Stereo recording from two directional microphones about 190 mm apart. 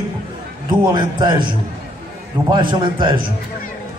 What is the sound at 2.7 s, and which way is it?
Speech, 25° right (ahead or behind).